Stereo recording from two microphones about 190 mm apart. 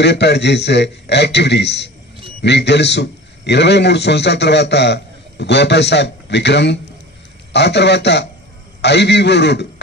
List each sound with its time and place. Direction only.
0.0 s a man's voice: 65° left (ahead or behind)